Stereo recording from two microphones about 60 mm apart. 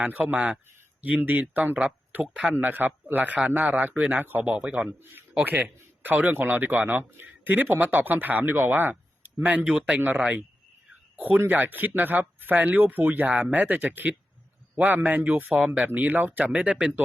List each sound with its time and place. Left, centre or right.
0.0 s speech: right
4.9 s a man's voice: right
9.7 s speech: centre
11.2 s speech: right; by 15.9 s centre
16.0 s speech: right